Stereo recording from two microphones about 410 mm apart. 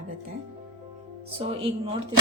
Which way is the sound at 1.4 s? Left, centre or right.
Centre.